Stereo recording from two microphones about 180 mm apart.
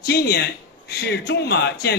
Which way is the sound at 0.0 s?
65° left (ahead or behind).